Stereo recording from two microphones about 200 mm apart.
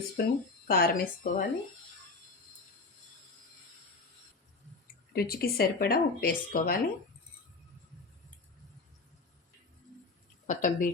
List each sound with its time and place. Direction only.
0.2 s speech: 50° left (ahead or behind)
5.1 s speech: 50° left (ahead or behind)
10.4 s a woman's voice: 40° left (ahead or behind)